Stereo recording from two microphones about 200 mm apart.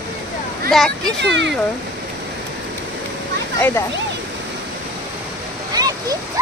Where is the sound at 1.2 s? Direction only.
65° right (ahead or behind).